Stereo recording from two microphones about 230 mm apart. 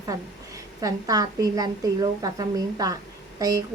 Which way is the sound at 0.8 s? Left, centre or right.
Centre.